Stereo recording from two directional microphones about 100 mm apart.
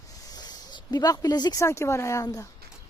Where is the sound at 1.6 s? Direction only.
30° left (ahead or behind).